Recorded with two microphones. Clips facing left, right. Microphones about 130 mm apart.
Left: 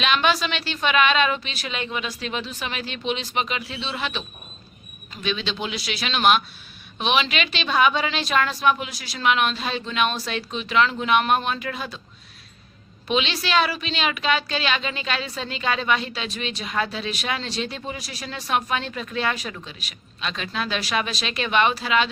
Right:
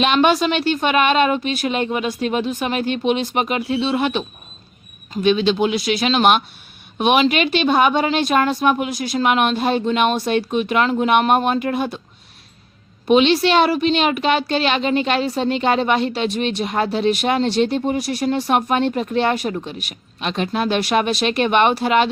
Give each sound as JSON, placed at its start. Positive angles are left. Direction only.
{"t": 0.0, "sound": "a woman's voice", "side_deg": -50}
{"t": 13.1, "sound": "a woman's voice", "side_deg": -55}
{"t": 18.3, "sound": "speech", "side_deg": -30}
{"t": 18.5, "sound": "speech", "side_deg": -55}